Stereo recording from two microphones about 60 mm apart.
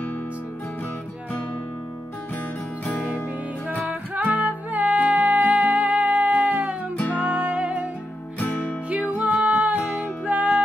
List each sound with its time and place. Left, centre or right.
2.8 s music: left
3.8 s music: right
8.4 s music: left
8.9 s music: right